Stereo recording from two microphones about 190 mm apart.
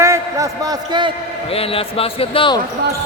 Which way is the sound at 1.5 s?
30° left (ahead or behind).